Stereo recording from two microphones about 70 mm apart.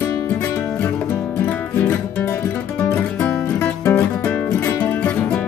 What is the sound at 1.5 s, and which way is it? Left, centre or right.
Music, left.